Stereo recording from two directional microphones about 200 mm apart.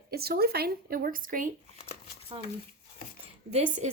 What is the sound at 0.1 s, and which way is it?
Speech, 50° right (ahead or behind).